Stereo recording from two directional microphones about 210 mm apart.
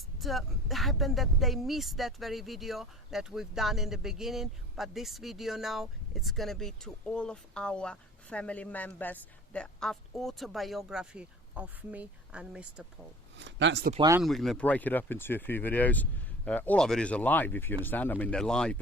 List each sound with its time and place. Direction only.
0.2 s speech: centre (ahead or behind)
13.4 s speech: 60° right (ahead or behind)
14.2 s speech: centre (ahead or behind)